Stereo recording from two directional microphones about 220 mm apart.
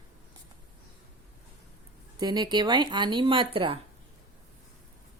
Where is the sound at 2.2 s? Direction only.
20° right (ahead or behind).